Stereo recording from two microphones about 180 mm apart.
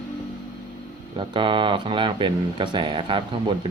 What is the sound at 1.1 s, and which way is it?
Speech, 25° right (ahead or behind).